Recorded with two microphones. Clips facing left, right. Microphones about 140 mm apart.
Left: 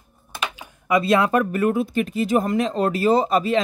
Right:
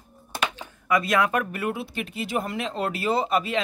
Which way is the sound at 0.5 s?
10° left (ahead or behind).